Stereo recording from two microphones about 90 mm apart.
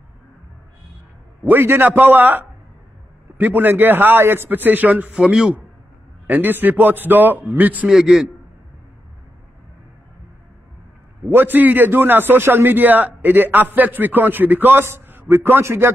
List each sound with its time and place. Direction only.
1.4 s a man's voice: 25° right (ahead or behind)
5.1 s a man's voice: 5° right (ahead or behind)
6.2 s a man's voice: 20° right (ahead or behind)
7.9 s a man's voice: 5° right (ahead or behind)
11.2 s a man's voice: 20° right (ahead or behind)